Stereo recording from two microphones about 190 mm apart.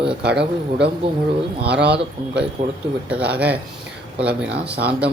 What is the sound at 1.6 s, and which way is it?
Speech, 60° right (ahead or behind).